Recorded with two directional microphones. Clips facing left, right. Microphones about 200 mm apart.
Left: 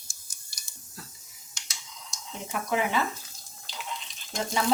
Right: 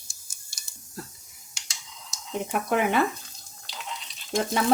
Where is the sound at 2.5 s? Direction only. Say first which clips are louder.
Right 3 dB; 60° right (ahead or behind).